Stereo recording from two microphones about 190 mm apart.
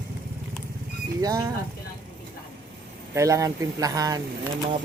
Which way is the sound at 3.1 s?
15° right (ahead or behind).